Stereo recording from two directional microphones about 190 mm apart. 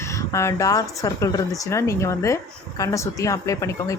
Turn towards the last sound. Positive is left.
turn(degrees=15)  # may be behind; listen again after turning